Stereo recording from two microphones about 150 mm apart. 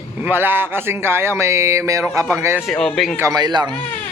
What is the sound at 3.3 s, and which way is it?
Speech, 25° right (ahead or behind).